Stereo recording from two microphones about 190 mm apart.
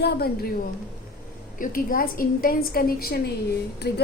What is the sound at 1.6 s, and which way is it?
A woman's voice, 45° left (ahead or behind).